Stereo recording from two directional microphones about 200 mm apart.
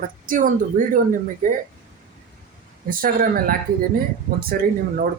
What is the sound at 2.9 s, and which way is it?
Speech, 45° right (ahead or behind).